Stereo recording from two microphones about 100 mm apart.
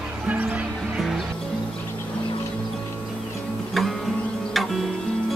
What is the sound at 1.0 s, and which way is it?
Music, centre (ahead or behind).